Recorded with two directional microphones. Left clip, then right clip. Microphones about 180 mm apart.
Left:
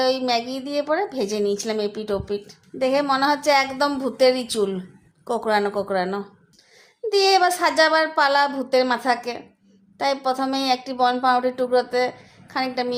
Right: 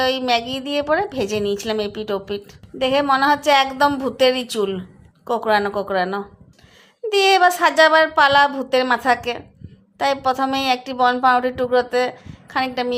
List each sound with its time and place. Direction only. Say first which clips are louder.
0.0 s a woman's voice: right 2 dB; 20° right (ahead or behind)